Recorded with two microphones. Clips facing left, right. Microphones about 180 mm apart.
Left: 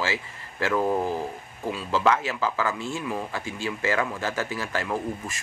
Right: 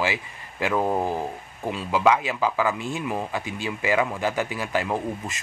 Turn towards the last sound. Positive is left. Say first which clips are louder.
# right 2 dB
turn(degrees=-15)  # may be behind; listen again after turning